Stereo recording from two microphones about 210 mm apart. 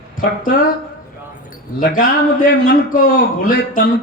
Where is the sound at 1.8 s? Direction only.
40° left (ahead or behind).